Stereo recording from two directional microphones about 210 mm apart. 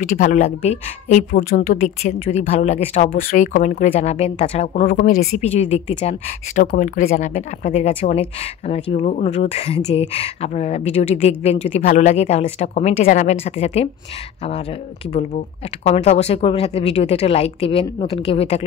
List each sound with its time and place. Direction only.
0.2 s a woman's voice: 35° left (ahead or behind)
4.8 s a woman's voice: 45° left (ahead or behind); by 18.6 s 30° left (ahead or behind)